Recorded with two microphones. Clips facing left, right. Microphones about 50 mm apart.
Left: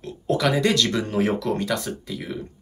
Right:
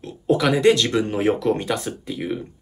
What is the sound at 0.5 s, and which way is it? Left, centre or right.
Speech, right.